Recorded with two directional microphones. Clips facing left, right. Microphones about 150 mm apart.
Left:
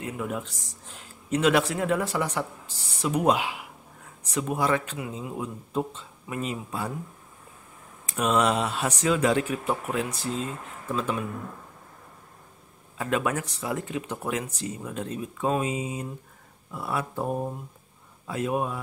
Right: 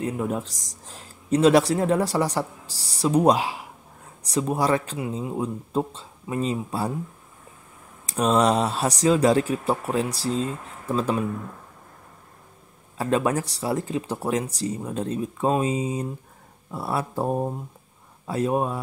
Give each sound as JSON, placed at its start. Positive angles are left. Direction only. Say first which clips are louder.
{"t": 0.0, "sound": "speech", "louder": "right 5 dB", "side_deg": -35}
{"t": 8.1, "sound": "speech", "louder": "right 4 dB", "side_deg": -35}
{"t": 12.9, "sound": "speech", "louder": "right 4 dB", "side_deg": -35}